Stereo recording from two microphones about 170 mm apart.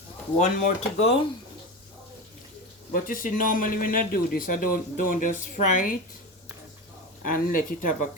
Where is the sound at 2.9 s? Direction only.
55° left (ahead or behind).